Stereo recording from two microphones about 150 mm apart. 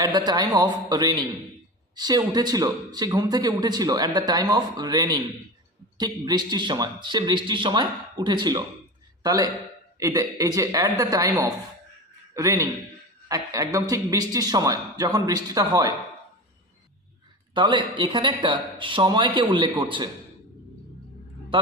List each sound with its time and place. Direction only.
0.0 s a man's voice: 25° right (ahead or behind)
17.5 s speech: 30° right (ahead or behind)